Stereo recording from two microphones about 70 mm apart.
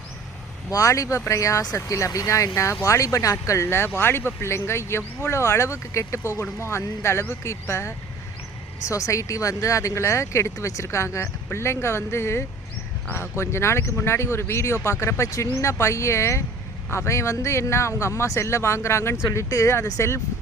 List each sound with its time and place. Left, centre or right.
0.7 s speech: left